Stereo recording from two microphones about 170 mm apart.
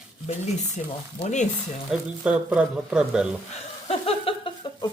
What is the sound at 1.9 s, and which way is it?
Speech, 5° right (ahead or behind).